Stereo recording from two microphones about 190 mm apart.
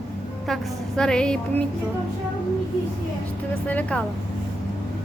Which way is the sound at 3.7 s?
5° left (ahead or behind).